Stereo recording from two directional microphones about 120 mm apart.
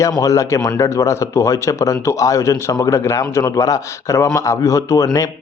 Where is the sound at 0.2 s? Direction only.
25° left (ahead or behind).